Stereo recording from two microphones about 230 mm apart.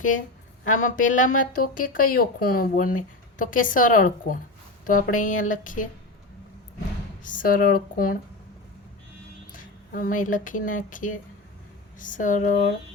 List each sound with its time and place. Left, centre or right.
0.7 s speech: left
7.3 s speech: left
9.5 s speech: left